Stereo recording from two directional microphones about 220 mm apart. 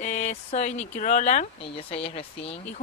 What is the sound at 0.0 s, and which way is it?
Speech, 35° left (ahead or behind).